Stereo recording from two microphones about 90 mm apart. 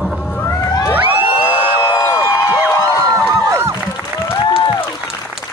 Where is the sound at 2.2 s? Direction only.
25° right (ahead or behind).